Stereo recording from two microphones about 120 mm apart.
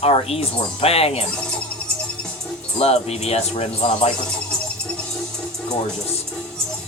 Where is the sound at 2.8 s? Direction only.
60° left (ahead or behind).